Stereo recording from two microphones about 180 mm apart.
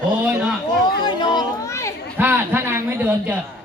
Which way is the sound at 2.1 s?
10° right (ahead or behind).